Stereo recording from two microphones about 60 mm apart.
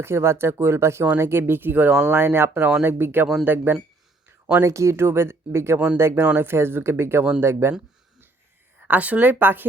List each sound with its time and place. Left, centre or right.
0.0 s speech: right
2.0 s speech: right
2.6 s speech: centre
2.8 s speech: right
4.6 s speech: right
8.9 s speech: right